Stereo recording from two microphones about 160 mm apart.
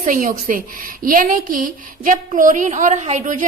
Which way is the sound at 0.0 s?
55° right (ahead or behind).